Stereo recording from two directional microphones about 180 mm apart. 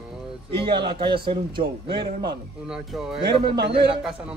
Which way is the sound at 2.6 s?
5° right (ahead or behind).